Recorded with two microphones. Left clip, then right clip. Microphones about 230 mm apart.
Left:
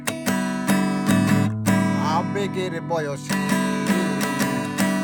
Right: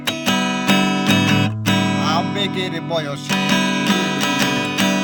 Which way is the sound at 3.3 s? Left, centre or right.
Right.